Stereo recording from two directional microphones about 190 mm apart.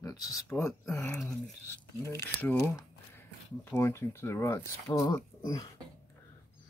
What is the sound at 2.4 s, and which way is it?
Speech, 10° left (ahead or behind).